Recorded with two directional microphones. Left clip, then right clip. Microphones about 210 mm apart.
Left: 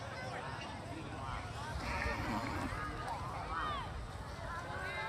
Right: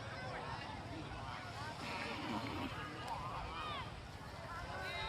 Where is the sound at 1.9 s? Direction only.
40° left (ahead or behind).